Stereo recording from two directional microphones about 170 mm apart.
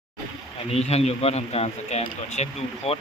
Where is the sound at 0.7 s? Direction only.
35° left (ahead or behind).